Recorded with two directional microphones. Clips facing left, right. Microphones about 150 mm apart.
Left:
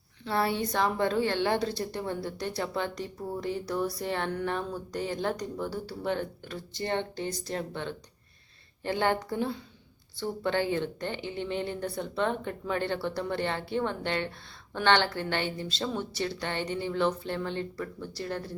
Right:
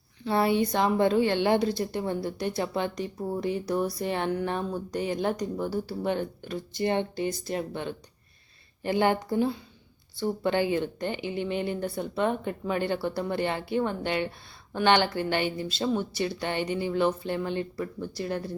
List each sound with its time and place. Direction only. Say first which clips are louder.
0.3 s speech: right 4 dB; 20° right (ahead or behind)